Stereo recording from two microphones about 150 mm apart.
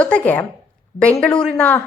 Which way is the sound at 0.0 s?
10° left (ahead or behind).